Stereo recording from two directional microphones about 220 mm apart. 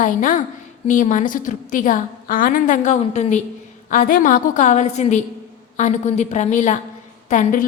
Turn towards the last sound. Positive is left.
turn(degrees=35)  # may be behind; listen again after turning